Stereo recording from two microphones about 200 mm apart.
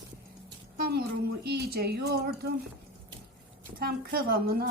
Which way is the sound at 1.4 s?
55° right (ahead or behind).